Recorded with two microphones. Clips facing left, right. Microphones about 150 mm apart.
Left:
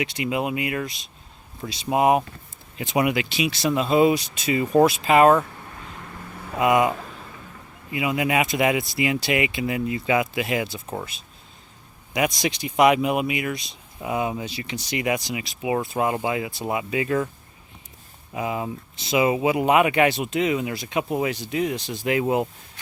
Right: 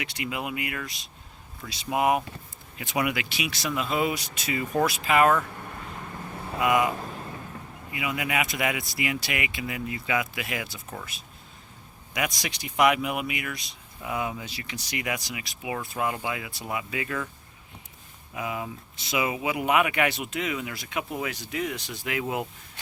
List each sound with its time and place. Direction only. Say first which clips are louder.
0.0 s speech: left 7 dB; 25° left (ahead or behind)
6.6 s speech: left 4 dB; 25° left (ahead or behind)
7.9 s speech: left 6 dB; 25° left (ahead or behind)
18.3 s speech: left 5 dB; 30° left (ahead or behind)